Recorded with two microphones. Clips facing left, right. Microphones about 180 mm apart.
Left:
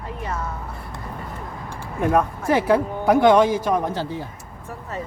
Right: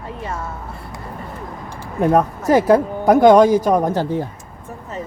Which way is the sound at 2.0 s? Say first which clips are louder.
Right 4 dB; 35° right (ahead or behind).